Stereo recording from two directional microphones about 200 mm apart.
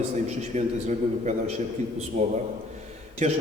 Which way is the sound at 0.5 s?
35° right (ahead or behind).